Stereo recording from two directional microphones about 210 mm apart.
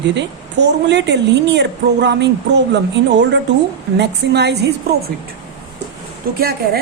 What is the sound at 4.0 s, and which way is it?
Speech, 55° right (ahead or behind).